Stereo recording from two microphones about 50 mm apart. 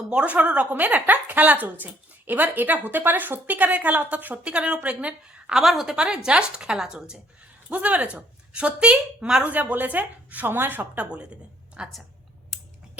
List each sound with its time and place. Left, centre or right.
0.1 s speech: right
5.5 s a woman's voice: centre
7.7 s speech: right
9.5 s speech: right